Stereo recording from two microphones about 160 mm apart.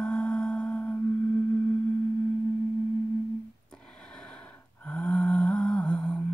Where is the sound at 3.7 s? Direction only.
5° left (ahead or behind).